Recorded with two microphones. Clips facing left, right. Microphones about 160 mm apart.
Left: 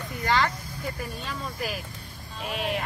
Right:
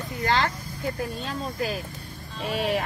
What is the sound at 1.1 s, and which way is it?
Speech, 30° right (ahead or behind).